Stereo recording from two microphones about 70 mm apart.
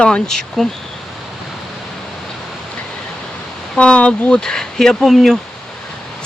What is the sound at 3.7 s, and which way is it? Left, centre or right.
Speech, centre.